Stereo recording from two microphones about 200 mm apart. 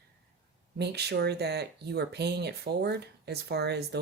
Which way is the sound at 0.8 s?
55° right (ahead or behind).